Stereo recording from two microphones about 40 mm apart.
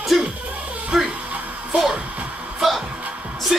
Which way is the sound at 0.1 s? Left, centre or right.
Centre.